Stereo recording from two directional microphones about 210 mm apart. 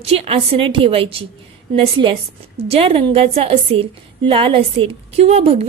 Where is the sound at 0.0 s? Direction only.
30° right (ahead or behind).